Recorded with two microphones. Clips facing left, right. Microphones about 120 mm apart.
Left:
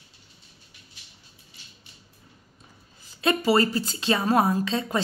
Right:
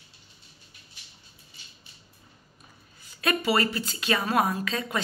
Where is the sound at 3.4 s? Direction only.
30° left (ahead or behind).